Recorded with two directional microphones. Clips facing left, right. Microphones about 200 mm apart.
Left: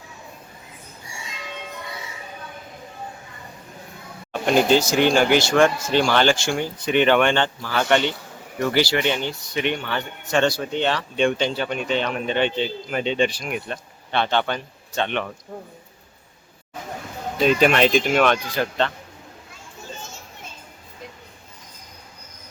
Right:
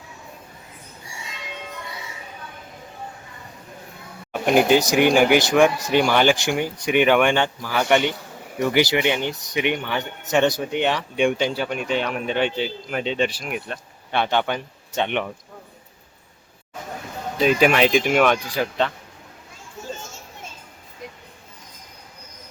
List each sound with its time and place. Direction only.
4.3 s speech: 10° right (ahead or behind)
17.4 s speech: 5° right (ahead or behind)